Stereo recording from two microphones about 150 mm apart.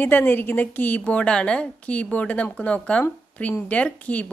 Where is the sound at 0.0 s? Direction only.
15° left (ahead or behind).